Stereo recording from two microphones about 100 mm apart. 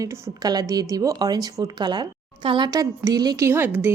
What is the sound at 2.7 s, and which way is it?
Speech, 35° right (ahead or behind).